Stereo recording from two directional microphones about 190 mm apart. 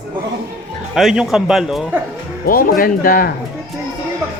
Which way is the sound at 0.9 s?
Centre (ahead or behind).